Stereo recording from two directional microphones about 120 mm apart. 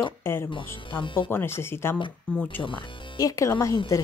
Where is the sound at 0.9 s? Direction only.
45° left (ahead or behind).